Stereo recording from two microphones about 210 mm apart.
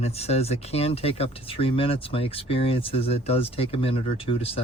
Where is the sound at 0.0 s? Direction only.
30° left (ahead or behind).